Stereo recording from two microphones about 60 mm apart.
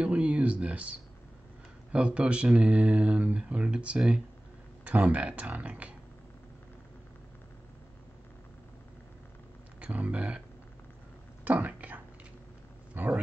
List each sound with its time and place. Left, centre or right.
0.0 s a sound: centre
1.9 s speech: centre
9.8 s speech: right
11.4 s speech: right